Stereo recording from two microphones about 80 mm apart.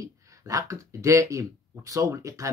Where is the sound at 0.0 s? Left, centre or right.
Right.